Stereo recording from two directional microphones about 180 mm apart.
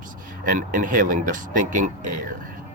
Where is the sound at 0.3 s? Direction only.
50° right (ahead or behind).